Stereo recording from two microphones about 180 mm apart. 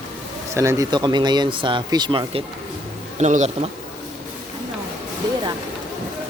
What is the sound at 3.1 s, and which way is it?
Speech, 40° right (ahead or behind).